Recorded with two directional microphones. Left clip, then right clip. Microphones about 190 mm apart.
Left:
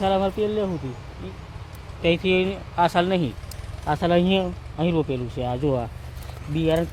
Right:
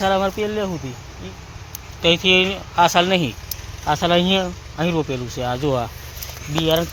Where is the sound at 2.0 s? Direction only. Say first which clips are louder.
Right 6 dB; 10° right (ahead or behind).